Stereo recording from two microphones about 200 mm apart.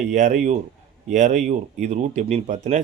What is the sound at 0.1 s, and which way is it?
Speech, 35° right (ahead or behind).